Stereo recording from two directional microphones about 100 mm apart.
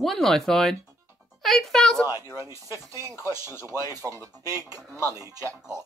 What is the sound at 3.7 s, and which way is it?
Speech, 35° right (ahead or behind).